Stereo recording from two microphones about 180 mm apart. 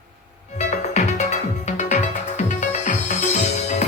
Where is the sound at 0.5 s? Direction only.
40° left (ahead or behind).